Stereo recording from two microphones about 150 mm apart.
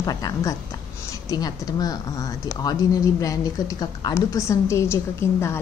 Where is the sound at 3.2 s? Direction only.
25° left (ahead or behind).